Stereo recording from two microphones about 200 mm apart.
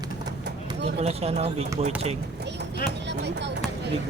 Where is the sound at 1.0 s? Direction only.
30° right (ahead or behind).